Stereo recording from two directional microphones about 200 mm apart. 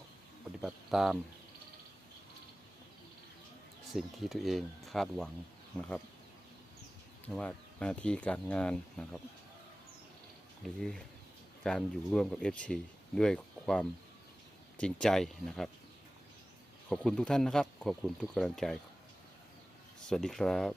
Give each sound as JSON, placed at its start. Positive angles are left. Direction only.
{"t": 0.6, "sound": "a sound", "side_deg": 0}
{"t": 3.9, "sound": "speech", "side_deg": 0}
{"t": 7.3, "sound": "speech", "side_deg": 5}
{"t": 10.6, "sound": "speech", "side_deg": 0}
{"t": 16.9, "sound": "speech", "side_deg": 5}
{"t": 20.1, "sound": "speech", "side_deg": 5}